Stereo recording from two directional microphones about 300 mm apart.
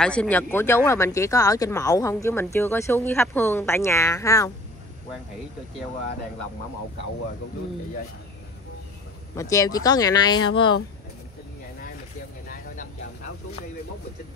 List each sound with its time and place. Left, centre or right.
0.0 s speech: centre
9.3 s speech: centre